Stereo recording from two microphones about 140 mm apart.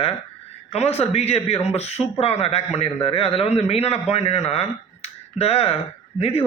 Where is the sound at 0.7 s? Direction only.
45° left (ahead or behind).